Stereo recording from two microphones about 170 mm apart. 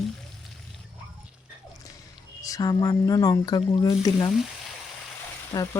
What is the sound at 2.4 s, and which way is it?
Speech, 20° left (ahead or behind).